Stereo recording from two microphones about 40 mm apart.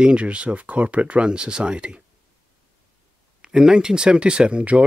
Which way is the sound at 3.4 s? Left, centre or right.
Right.